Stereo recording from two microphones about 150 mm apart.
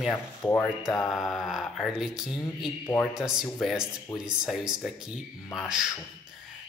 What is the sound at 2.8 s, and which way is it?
Speech, 15° left (ahead or behind).